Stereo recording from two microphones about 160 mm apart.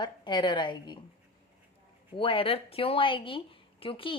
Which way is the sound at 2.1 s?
35° left (ahead or behind).